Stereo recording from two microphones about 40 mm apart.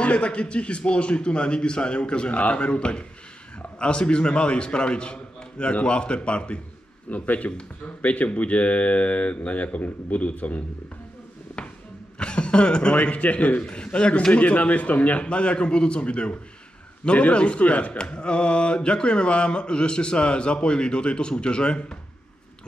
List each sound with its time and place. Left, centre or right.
0.0 s speech: left
7.1 s speech: left
11.6 s music: left
12.2 s speech: left
13.7 s speech: left